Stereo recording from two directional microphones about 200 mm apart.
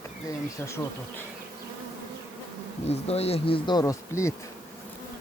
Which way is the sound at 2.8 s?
30° left (ahead or behind).